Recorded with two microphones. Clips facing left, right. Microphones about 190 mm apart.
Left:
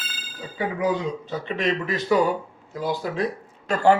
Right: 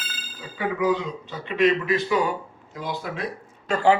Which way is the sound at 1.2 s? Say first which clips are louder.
Right 7 dB; 40° left (ahead or behind).